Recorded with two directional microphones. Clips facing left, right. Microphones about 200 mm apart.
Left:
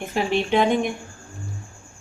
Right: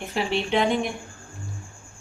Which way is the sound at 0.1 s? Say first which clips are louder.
Left 3 dB; 50° left (ahead or behind).